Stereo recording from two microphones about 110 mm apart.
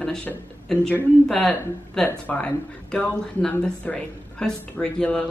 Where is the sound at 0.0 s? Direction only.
5° left (ahead or behind).